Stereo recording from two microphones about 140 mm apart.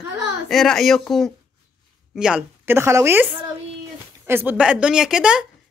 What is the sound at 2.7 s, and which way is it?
Speech, 20° right (ahead or behind).